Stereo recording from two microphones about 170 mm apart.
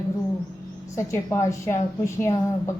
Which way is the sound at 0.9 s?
15° left (ahead or behind).